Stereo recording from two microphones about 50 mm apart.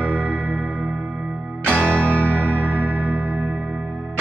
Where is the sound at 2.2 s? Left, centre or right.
Left.